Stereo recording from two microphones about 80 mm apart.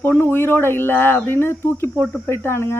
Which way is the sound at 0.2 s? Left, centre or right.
Left.